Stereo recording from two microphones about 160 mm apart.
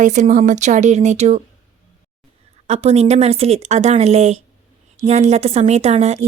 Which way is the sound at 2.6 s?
40° right (ahead or behind).